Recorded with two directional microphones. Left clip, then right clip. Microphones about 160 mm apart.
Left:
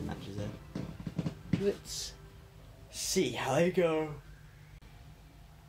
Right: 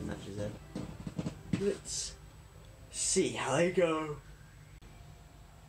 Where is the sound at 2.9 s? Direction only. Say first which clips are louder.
Even; 45° left (ahead or behind).